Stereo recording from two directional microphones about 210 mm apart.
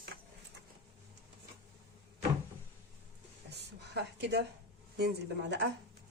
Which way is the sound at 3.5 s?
50° right (ahead or behind).